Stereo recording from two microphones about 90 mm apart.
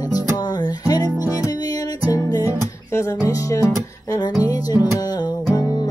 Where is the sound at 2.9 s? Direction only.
35° left (ahead or behind).